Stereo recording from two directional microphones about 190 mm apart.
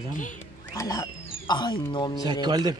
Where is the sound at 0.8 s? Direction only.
20° left (ahead or behind).